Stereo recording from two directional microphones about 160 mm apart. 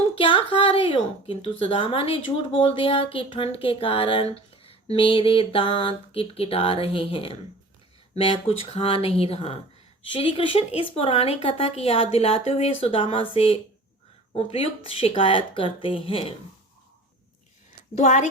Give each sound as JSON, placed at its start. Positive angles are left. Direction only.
{"t": 0.2, "sound": "a woman's voice", "side_deg": 35}
{"t": 4.5, "sound": "a sound", "side_deg": 35}
{"t": 6.8, "sound": "a woman's voice", "side_deg": 35}
{"t": 17.9, "sound": "a woman's voice", "side_deg": 50}